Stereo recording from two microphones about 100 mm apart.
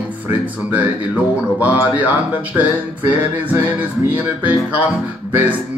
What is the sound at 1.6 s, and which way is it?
Music, 15° right (ahead or behind).